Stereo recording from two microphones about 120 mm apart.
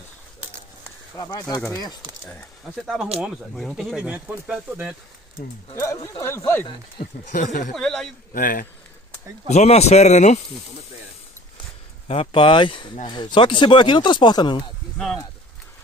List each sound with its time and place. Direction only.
1.1 s speech: 30° left (ahead or behind)
2.2 s speech: 5° left (ahead or behind); by 4.9 s 10° right (ahead or behind)
5.8 s speech: 25° left (ahead or behind)
7.2 s speech: 90° left
7.7 s speech: centre (ahead or behind)
9.5 s speech: 65° left (ahead or behind)
12.1 s speech: 50° left (ahead or behind)